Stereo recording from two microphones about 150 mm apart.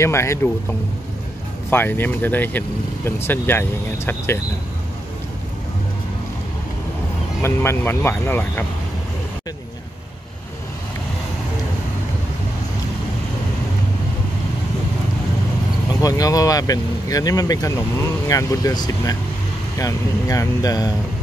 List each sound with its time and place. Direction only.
0.0 s speech: 20° left (ahead or behind)
1.7 s speech: 15° left (ahead or behind)
7.4 s speech: 15° left (ahead or behind)
15.9 s speech: 25° left (ahead or behind)